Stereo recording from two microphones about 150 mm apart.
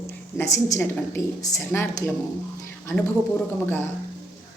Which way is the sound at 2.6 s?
20° left (ahead or behind).